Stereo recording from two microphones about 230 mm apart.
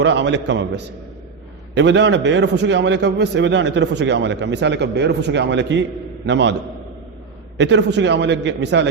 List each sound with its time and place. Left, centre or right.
0.0 s a man's voice: right
7.6 s a man's voice: right